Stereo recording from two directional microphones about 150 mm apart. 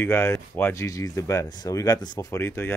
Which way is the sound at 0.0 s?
15° left (ahead or behind).